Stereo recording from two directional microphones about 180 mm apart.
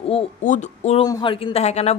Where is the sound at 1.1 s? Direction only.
25° left (ahead or behind).